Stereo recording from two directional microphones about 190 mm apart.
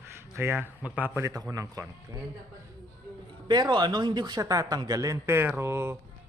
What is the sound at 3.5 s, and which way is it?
A man's voice, 20° right (ahead or behind).